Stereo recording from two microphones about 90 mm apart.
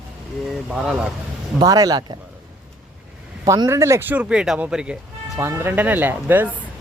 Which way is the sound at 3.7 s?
30° right (ahead or behind).